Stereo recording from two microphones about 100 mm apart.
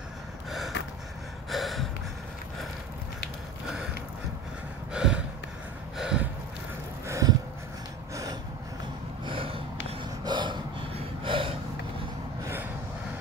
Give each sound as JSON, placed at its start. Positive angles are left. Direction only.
{"t": 0.5, "sound": "gasp", "side_deg": 0}
{"t": 4.9, "sound": "gasp", "side_deg": -10}
{"t": 5.9, "sound": "snort", "side_deg": -10}
{"t": 7.1, "sound": "a sound", "side_deg": -35}
{"t": 9.2, "sound": "a sound", "side_deg": -60}
{"t": 10.2, "sound": "snort", "side_deg": -50}